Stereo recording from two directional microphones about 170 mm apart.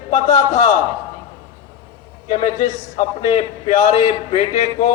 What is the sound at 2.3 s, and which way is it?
Speech, 40° left (ahead or behind).